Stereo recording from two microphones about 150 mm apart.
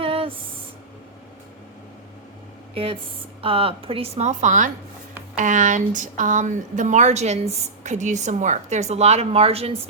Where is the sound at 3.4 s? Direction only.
40° right (ahead or behind).